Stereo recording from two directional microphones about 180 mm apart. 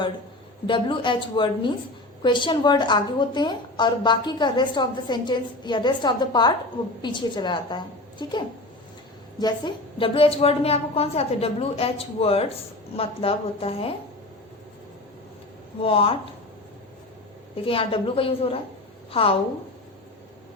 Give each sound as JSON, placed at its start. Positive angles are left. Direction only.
{"t": 0.7, "sound": "a woman's voice", "side_deg": 25}
{"t": 15.8, "sound": "a woman's voice", "side_deg": 30}
{"t": 17.7, "sound": "a woman's voice", "side_deg": 30}